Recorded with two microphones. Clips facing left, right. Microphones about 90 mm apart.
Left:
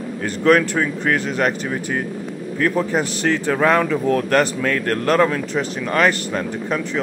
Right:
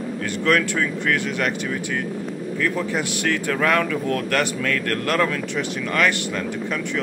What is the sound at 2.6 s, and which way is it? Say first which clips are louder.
Speech: left 5 dB; 35° left (ahead or behind).